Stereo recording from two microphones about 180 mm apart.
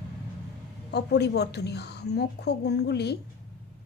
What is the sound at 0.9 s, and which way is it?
A woman's voice, 65° left (ahead or behind).